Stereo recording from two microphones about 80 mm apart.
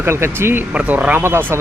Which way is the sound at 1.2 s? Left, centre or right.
Right.